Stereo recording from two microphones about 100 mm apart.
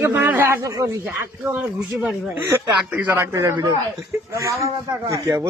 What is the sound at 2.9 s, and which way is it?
A man's voice, 20° right (ahead or behind).